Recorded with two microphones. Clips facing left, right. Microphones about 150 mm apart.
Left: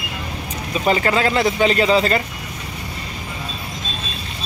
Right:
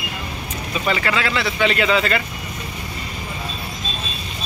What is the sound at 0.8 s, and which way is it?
Speech, 35° left (ahead or behind).